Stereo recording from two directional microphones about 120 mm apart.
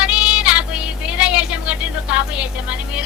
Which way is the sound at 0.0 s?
10° right (ahead or behind).